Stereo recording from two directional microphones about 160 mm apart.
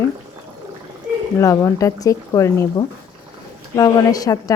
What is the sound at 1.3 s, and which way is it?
A woman's voice, 20° left (ahead or behind).